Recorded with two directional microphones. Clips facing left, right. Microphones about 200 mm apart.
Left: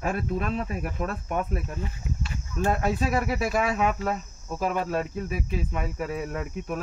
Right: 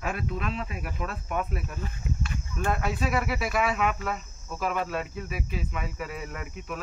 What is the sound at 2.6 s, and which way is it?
Speech, 40° left (ahead or behind).